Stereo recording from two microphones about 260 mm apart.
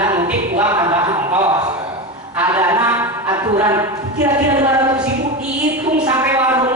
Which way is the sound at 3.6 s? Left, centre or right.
Centre.